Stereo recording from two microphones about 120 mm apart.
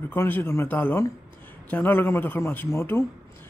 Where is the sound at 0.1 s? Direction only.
15° left (ahead or behind).